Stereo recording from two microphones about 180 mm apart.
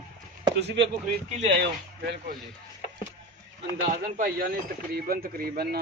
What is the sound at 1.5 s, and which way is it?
Speech, 70° right (ahead or behind).